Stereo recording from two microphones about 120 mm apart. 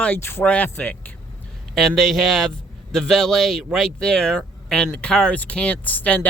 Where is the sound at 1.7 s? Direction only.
Centre (ahead or behind).